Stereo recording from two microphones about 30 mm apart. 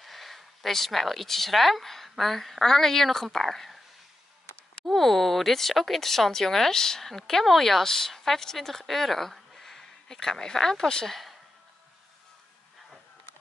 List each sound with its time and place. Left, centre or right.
0.0 s speech: centre
4.8 s a woman's voice: centre
9.5 s a sound: centre
11.1 s speech: centre